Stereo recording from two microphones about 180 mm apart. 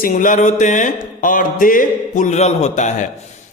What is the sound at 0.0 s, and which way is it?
A man's voice, 45° left (ahead or behind).